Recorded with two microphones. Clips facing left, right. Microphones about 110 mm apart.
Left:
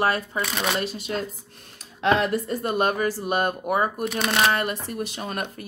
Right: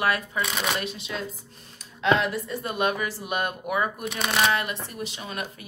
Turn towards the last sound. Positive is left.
turn(degrees=45)  # may be behind; listen again after turning